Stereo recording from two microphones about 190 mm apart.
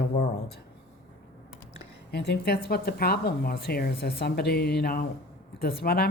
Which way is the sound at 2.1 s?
60° left (ahead or behind).